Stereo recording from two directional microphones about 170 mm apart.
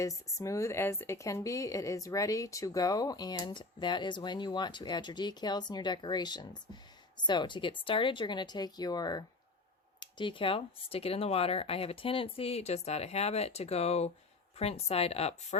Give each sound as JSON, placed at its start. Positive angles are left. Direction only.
{"t": 0.0, "sound": "speech", "side_deg": 20}